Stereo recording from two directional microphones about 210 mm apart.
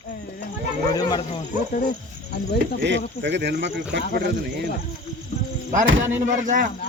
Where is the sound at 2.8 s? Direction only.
55° right (ahead or behind).